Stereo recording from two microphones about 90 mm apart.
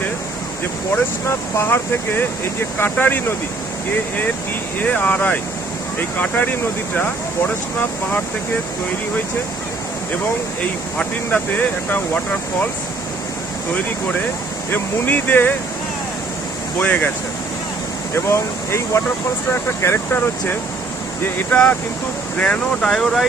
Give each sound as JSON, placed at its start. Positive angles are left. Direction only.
{"t": 0.9, "sound": "speech", "side_deg": 25}
{"t": 4.8, "sound": "speech", "side_deg": 20}
{"t": 10.9, "sound": "speech", "side_deg": 15}
{"t": 14.7, "sound": "speech", "side_deg": 20}
{"t": 16.8, "sound": "speech", "side_deg": 15}
{"t": 18.1, "sound": "speech", "side_deg": 30}
{"t": 21.5, "sound": "speech", "side_deg": 15}